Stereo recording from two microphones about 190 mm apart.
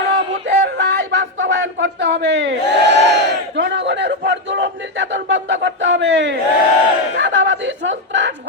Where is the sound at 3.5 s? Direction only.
65° right (ahead or behind).